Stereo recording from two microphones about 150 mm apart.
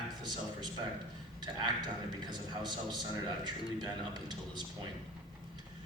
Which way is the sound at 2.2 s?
30° right (ahead or behind).